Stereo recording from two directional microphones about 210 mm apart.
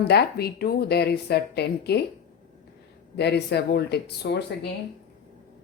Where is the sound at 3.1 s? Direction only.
50° left (ahead or behind).